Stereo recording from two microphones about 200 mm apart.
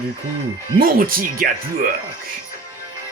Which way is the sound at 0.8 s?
45° right (ahead or behind).